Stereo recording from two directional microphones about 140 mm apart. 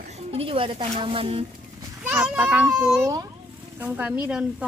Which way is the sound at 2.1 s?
10° right (ahead or behind).